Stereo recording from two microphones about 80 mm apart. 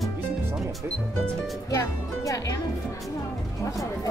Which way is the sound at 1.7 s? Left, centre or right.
Left.